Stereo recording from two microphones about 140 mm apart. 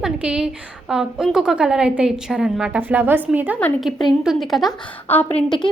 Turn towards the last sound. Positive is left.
turn(degrees=15)  # may be behind; listen again after turning